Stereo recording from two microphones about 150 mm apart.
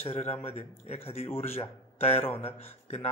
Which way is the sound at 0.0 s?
45° left (ahead or behind).